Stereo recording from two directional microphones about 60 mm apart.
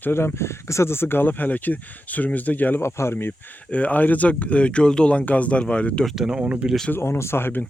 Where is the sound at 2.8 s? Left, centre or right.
Left.